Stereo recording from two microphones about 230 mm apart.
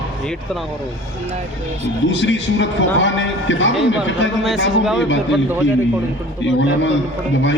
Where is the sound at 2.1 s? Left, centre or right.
Left.